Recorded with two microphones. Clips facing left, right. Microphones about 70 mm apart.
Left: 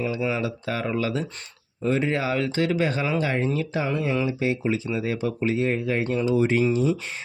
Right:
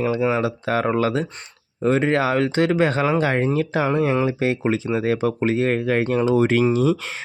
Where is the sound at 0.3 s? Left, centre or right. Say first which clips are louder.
Right 6 dB; right.